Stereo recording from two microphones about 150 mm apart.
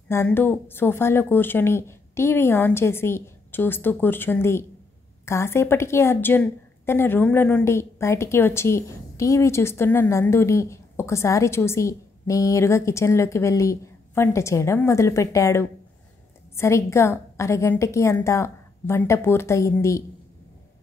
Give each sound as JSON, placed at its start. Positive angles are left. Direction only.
{"t": 0.1, "sound": "a woman's voice", "side_deg": 15}